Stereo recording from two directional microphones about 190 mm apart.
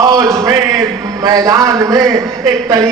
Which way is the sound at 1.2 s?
20° right (ahead or behind).